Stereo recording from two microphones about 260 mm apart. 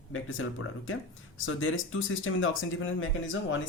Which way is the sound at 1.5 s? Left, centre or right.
Left.